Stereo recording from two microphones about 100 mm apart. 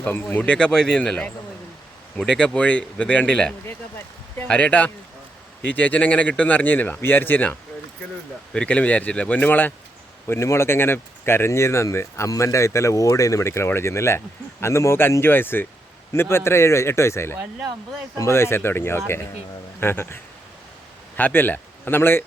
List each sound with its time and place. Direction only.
0.0 s speech: 20° left (ahead or behind)
3.7 s speech: 20° left (ahead or behind)
8.5 s speech: 10° left (ahead or behind)
21.2 s speech: 20° left (ahead or behind)